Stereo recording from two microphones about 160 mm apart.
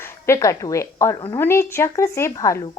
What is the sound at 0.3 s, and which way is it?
A woman's voice, 20° left (ahead or behind).